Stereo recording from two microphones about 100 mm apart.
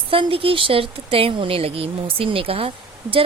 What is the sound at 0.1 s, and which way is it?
Speech, 65° right (ahead or behind).